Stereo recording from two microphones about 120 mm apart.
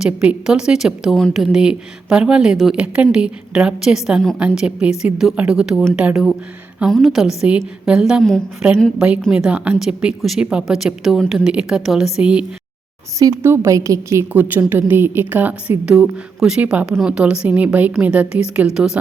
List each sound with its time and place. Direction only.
0.0 s a woman's voice: 5° right (ahead or behind)
4.4 s a woman's voice: 10° right (ahead or behind)
13.1 s a woman's voice: 25° right (ahead or behind); by 18.9 s 5° right (ahead or behind)